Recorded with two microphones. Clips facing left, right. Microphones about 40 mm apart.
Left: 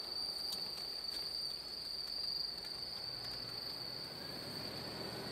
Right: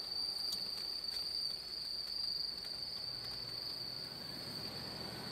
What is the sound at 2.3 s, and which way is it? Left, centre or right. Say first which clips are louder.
Cricket: even; left.